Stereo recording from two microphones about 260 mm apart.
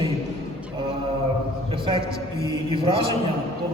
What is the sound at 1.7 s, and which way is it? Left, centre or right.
A woman's voice, centre.